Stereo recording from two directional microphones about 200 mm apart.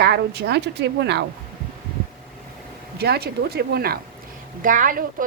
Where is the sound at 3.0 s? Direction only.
50° right (ahead or behind).